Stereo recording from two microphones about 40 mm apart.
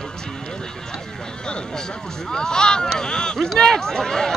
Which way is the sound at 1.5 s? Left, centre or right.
Left.